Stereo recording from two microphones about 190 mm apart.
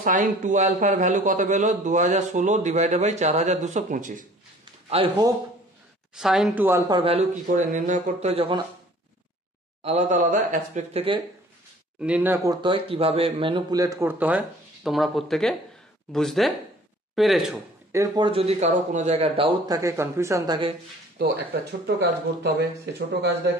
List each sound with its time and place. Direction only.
0.0 s a man's voice: 45° right (ahead or behind)
4.8 s a man's voice: 30° right (ahead or behind)
6.1 s speech: centre (ahead or behind)
7.0 s speech: 30° right (ahead or behind)
7.4 s a man's voice: 40° right (ahead or behind)
9.8 s a man's voice: 35° right (ahead or behind)
12.0 s speech: 10° right (ahead or behind)
12.6 s speech: 30° right (ahead or behind); by 17.6 s centre (ahead or behind)
17.9 s speech: 20° right (ahead or behind)
21.8 s speech: 60° right (ahead or behind)